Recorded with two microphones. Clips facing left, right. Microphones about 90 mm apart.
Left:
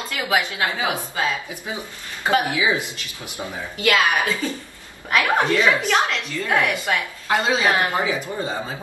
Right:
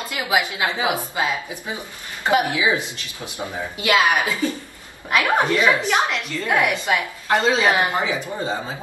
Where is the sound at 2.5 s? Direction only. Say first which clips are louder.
Right 1 dB; 20° right (ahead or behind).